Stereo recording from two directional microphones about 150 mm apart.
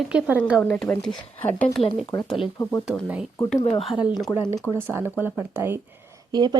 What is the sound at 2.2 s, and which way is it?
Speech, centre (ahead or behind).